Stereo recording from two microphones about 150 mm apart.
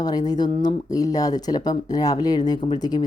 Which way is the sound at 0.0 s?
25° left (ahead or behind).